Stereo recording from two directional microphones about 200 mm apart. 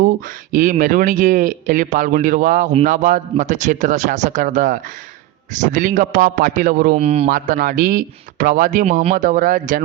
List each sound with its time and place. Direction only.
0.5 s speech: 40° right (ahead or behind)
7.0 s speech: 30° right (ahead or behind)
7.3 s speech: 40° right (ahead or behind)